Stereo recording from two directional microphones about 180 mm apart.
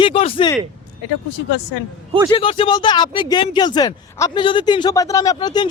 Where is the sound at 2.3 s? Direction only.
30° left (ahead or behind).